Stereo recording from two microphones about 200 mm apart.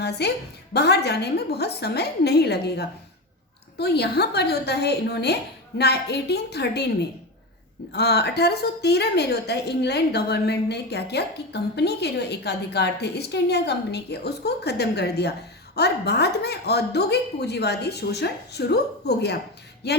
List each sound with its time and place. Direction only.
0.0 s a woman's voice: 55° left (ahead or behind)